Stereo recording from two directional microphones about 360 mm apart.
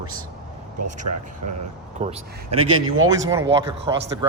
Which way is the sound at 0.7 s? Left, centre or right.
Right.